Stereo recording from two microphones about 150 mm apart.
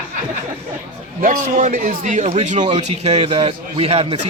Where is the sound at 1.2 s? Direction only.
60° right (ahead or behind); by 4.3 s 40° right (ahead or behind).